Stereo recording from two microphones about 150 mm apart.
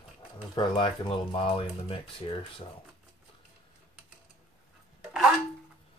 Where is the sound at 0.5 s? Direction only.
35° left (ahead or behind).